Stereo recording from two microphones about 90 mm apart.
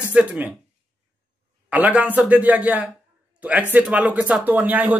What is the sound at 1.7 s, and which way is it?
Speech, 15° right (ahead or behind).